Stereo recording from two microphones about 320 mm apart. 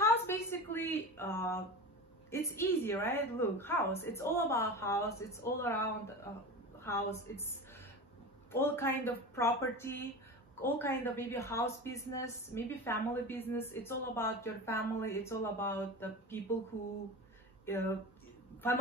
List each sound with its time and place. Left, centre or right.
0.0 s a sound: centre
2.3 s a woman's voice: centre
7.3 s a woman's voice: centre
8.5 s a woman's voice: centre
17.6 s a woman's voice: centre